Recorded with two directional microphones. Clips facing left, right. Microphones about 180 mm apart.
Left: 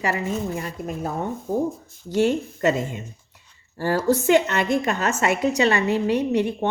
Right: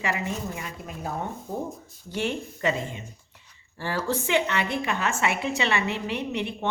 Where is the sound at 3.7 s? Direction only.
45° left (ahead or behind).